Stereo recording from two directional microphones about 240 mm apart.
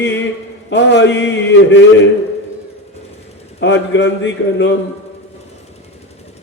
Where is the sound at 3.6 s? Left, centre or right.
Left.